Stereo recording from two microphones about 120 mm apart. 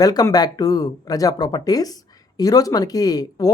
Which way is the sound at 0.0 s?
30° left (ahead or behind).